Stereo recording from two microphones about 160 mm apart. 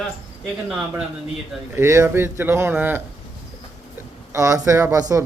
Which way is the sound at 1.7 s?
15° right (ahead or behind).